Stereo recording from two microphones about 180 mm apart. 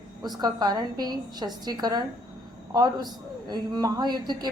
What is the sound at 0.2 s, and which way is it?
A woman's voice, 20° right (ahead or behind).